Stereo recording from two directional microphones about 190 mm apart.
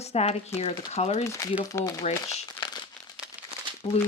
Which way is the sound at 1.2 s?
15° left (ahead or behind).